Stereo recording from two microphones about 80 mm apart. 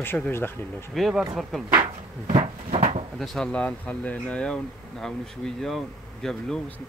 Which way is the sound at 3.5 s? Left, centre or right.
Centre.